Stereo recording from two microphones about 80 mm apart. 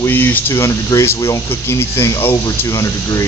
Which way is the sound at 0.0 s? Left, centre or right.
Left.